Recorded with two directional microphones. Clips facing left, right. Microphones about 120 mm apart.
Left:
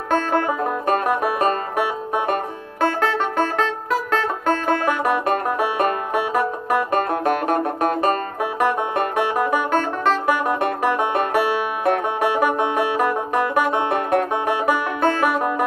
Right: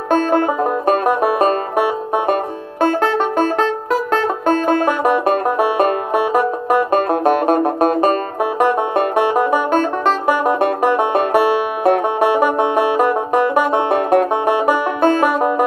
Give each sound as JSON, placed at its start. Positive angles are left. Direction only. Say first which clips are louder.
{"t": 0.1, "sound": "music", "louder": "right 5 dB", "side_deg": -25}
{"t": 1.2, "sound": "banjo", "louder": "right 5 dB", "side_deg": -25}
{"t": 2.8, "sound": "music", "louder": "right 5 dB", "side_deg": -25}
{"t": 4.1, "sound": "banjo", "louder": "right 5 dB", "side_deg": -25}